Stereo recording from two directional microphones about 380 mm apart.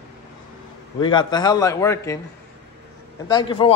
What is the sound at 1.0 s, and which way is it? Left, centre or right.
Speech, centre.